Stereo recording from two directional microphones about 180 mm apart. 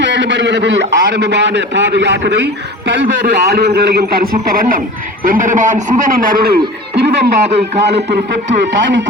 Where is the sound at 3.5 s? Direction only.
60° right (ahead or behind).